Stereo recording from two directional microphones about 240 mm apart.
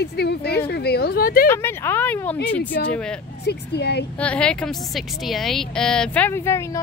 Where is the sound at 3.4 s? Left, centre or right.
Left.